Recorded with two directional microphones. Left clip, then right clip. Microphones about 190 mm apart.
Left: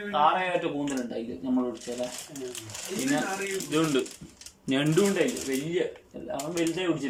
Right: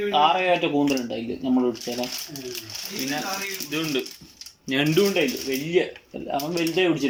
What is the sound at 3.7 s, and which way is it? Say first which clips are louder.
Speech: left 2 dB; centre (ahead or behind).